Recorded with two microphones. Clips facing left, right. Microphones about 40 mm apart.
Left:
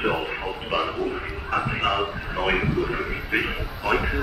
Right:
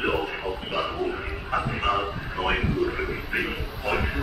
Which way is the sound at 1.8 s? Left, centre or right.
Left.